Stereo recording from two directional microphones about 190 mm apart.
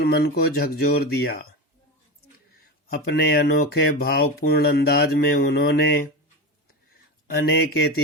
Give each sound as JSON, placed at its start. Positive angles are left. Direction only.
{"t": 0.0, "sound": "speech", "side_deg": 55}
{"t": 2.8, "sound": "speech", "side_deg": 60}
{"t": 7.3, "sound": "speech", "side_deg": 55}